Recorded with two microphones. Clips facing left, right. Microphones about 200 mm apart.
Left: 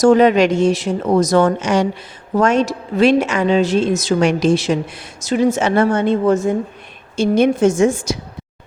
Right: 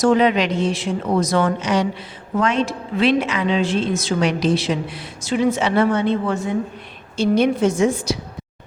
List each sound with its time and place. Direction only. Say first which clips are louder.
0.0 s speech: left 5 dB; 45° left (ahead or behind)